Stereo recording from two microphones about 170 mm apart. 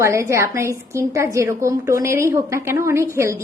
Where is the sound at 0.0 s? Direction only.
15° right (ahead or behind).